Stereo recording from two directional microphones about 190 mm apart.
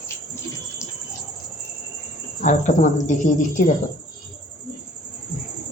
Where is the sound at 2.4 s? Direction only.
40° left (ahead or behind).